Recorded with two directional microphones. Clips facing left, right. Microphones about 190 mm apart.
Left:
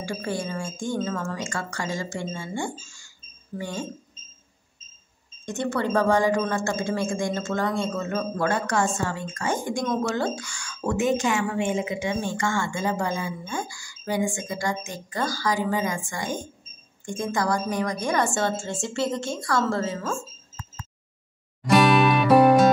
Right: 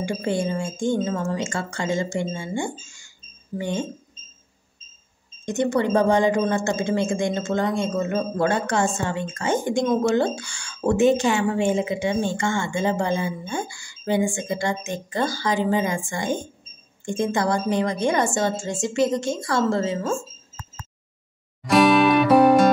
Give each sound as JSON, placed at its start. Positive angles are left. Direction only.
{"t": 0.0, "sound": "speech", "side_deg": -20}
{"t": 5.4, "sound": "speech", "side_deg": -20}
{"t": 21.6, "sound": "music", "side_deg": 0}